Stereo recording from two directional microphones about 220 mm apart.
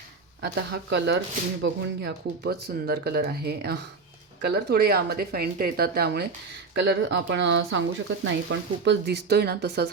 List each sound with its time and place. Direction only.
0.4 s speech: 50° right (ahead or behind)